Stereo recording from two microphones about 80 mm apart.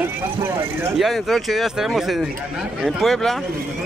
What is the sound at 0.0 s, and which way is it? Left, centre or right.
Speech, right.